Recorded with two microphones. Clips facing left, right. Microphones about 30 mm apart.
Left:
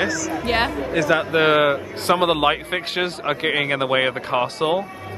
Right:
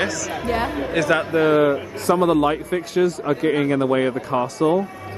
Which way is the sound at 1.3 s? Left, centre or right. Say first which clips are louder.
Even; left.